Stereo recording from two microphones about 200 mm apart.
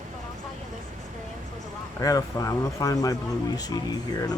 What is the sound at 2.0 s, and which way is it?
Speech, 15° left (ahead or behind).